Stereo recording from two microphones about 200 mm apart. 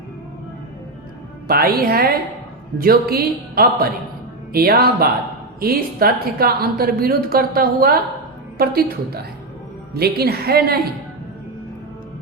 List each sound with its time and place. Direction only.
1.5 s a woman's voice: 50° right (ahead or behind)